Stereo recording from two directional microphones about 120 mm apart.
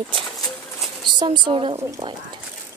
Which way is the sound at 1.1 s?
40° right (ahead or behind).